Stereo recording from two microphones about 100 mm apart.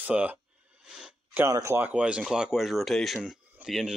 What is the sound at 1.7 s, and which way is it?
Speech, 15° right (ahead or behind).